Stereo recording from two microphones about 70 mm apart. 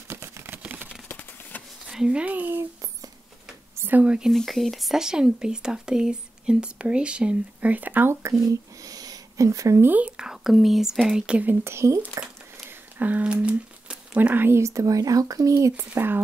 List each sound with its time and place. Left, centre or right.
0.1 s a sound: right
0.6 s a sound: right
1.0 s a sound: left
1.9 s speech: centre; by 2.6 s right
3.9 s speech: centre
4.3 s speech: centre; by 8.2 s right
8.2 s speech: right
9.8 s speech: right
10.2 s speech: centre
11.4 s speech: right
12.6 s a sound: right
14.6 s speech: right
15.7 s speech: right